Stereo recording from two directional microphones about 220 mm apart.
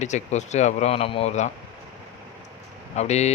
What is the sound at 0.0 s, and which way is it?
Speech, 30° left (ahead or behind).